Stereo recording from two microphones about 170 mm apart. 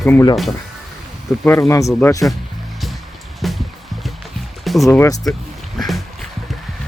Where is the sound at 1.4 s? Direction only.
15° left (ahead or behind).